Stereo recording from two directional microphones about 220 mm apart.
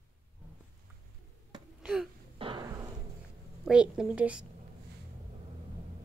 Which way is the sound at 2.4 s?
20° right (ahead or behind).